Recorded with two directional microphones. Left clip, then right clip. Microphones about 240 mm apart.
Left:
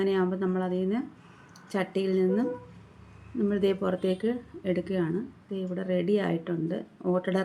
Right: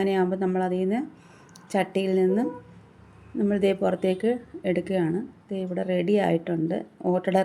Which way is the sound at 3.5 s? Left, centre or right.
Centre.